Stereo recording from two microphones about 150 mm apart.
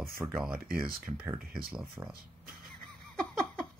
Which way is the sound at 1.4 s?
80° right.